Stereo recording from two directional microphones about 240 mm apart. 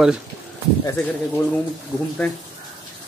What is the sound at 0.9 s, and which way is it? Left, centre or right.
Speech, centre.